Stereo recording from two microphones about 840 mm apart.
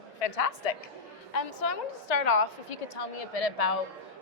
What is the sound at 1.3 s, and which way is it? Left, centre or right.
A woman's voice, left.